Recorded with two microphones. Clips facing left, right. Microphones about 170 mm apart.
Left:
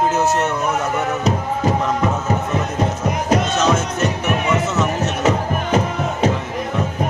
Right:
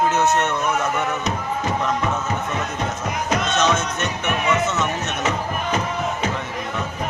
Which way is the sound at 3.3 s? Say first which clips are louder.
Left 3 dB; 30° left (ahead or behind).